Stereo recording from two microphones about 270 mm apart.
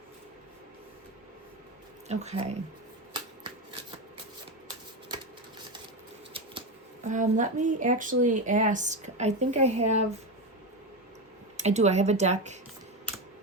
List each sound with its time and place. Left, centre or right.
2.0 s speech: right
7.1 s speech: right
11.5 s speech: right